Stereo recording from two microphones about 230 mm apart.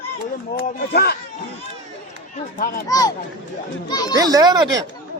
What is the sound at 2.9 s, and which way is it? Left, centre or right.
Speech, centre.